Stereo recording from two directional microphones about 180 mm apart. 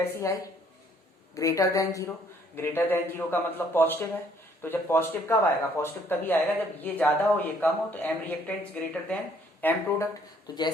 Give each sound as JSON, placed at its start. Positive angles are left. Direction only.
{"t": 0.2, "sound": "speech", "side_deg": 15}
{"t": 10.5, "sound": "speech", "side_deg": 20}